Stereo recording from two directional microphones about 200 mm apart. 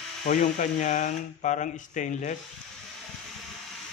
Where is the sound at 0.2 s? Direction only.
35° left (ahead or behind).